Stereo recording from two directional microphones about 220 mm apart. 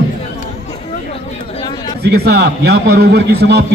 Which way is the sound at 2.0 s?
45° right (ahead or behind).